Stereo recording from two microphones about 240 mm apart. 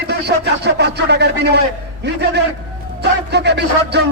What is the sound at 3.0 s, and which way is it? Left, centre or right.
A man's voice, right.